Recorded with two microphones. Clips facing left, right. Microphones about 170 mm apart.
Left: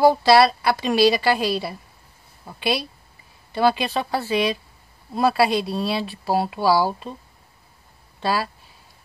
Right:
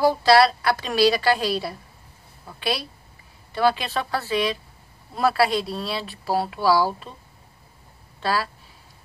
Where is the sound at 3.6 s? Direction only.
20° left (ahead or behind).